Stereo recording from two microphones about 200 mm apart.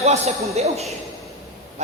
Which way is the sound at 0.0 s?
35° right (ahead or behind).